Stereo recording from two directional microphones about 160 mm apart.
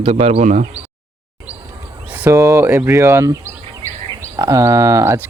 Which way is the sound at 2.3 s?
20° right (ahead or behind).